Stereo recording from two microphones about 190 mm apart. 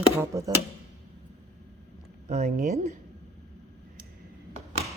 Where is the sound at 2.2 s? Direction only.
40° right (ahead or behind).